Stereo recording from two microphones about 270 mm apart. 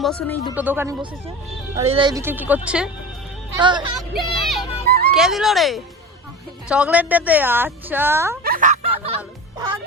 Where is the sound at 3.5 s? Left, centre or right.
Centre.